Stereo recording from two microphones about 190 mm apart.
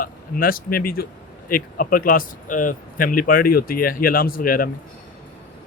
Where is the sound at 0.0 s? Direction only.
50° left (ahead or behind).